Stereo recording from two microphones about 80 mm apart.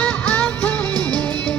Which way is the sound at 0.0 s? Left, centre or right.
Centre.